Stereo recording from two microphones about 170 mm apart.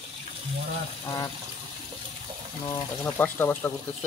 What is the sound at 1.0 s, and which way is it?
Speech, 15° left (ahead or behind).